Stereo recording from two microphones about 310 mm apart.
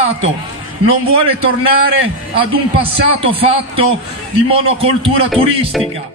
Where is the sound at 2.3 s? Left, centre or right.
Centre.